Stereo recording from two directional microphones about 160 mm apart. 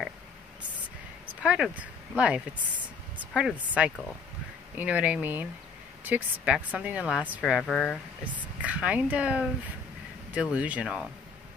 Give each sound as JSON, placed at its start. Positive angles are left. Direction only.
{"t": 1.4, "sound": "a woman's voice", "side_deg": -5}